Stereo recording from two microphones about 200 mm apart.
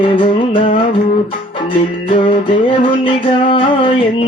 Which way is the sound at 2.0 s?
25° left (ahead or behind).